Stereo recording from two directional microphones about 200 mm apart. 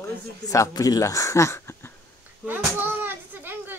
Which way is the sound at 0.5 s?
15° left (ahead or behind).